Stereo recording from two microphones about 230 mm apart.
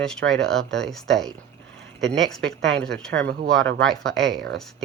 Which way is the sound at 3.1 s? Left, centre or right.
Right.